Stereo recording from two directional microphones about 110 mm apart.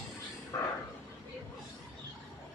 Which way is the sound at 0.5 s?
30° left (ahead or behind).